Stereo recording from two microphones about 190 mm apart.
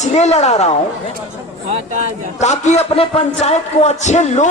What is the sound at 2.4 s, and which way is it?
A man's voice, 35° left (ahead or behind).